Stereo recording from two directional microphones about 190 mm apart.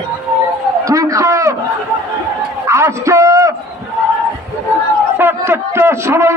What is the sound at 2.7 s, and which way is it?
Speech, 15° right (ahead or behind).